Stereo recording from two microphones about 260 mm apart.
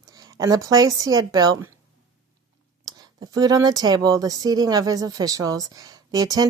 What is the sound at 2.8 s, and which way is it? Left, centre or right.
Speech, centre.